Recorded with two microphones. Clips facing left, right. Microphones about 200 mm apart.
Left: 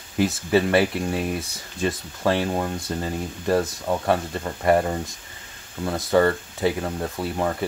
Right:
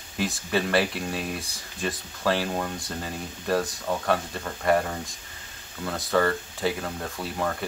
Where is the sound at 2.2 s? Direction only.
25° left (ahead or behind).